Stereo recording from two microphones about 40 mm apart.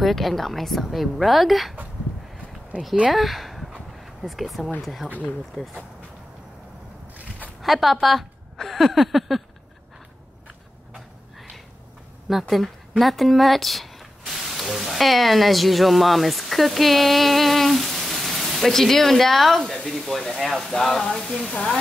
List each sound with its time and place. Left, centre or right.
0.0 s speech: centre
2.7 s speech: right
3.1 s speech: centre
7.6 s speech: centre
12.3 s speech: centre